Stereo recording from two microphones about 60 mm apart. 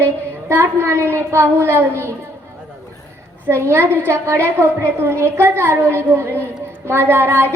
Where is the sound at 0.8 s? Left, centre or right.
Right.